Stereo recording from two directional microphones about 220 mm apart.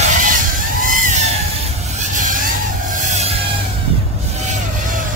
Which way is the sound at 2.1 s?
35° right (ahead or behind).